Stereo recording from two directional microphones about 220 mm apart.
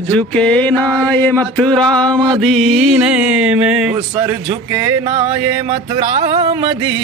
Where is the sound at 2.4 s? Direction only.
Centre (ahead or behind).